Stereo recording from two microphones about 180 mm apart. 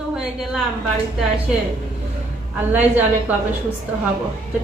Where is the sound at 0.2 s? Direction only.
Centre (ahead or behind).